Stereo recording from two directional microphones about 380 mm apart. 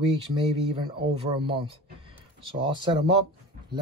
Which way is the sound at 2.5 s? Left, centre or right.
Centre.